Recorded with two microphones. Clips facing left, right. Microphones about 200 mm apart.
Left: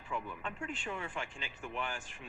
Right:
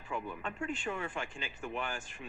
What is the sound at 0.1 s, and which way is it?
Speech, 45° right (ahead or behind).